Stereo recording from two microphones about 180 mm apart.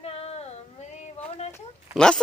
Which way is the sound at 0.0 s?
35° left (ahead or behind).